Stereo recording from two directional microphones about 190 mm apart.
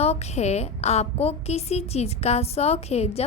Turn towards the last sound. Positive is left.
turn(degrees=35)  # may be behind; listen again after turning